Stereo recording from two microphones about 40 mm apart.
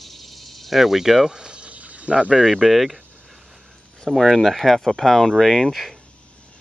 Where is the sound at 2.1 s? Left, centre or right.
Right.